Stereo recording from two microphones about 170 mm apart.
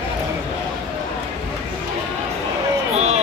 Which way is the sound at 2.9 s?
40° right (ahead or behind).